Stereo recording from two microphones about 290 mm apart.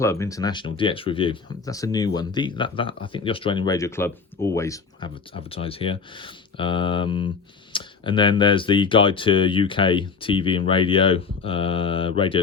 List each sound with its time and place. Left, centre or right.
0.0 s speech: centre